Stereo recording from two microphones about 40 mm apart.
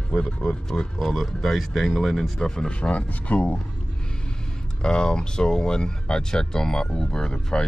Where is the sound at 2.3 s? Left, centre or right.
Centre.